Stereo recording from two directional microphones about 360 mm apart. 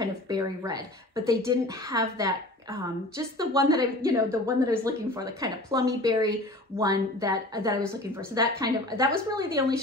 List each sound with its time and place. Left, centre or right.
0.3 s a woman's voice: centre